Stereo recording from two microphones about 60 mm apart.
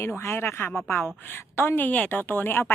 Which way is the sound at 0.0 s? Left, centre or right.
Left.